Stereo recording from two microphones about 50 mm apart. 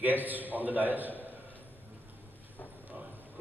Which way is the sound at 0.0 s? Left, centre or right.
Right.